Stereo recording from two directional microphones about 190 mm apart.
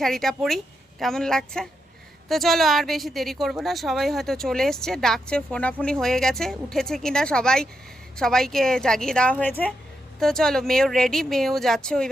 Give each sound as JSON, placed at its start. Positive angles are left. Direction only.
{"t": 0.0, "sound": "a woman's voice", "side_deg": 0}